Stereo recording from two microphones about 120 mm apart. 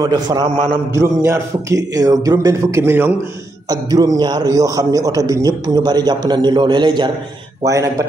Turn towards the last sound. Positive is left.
turn(degrees=-25)  # may be behind; listen again after turning